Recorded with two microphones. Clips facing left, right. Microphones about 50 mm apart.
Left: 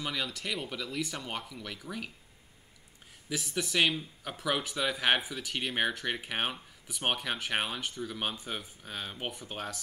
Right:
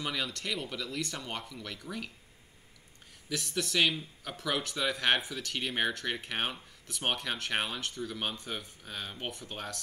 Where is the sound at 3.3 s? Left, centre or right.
Centre.